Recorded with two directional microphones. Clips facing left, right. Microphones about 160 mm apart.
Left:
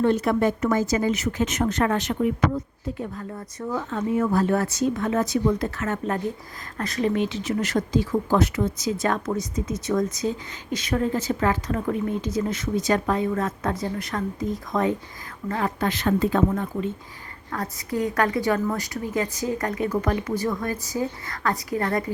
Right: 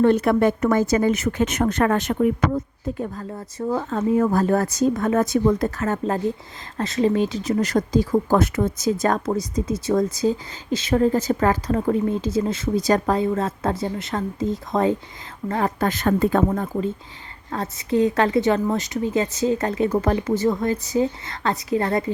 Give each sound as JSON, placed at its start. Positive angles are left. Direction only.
{"t": 0.0, "sound": "speech", "side_deg": -60}
{"t": 3.0, "sound": "speech", "side_deg": -35}
{"t": 5.8, "sound": "a woman's voice", "side_deg": -30}
{"t": 17.5, "sound": "a woman's voice", "side_deg": -25}